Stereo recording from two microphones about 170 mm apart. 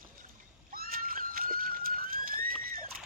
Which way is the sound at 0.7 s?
60° right (ahead or behind).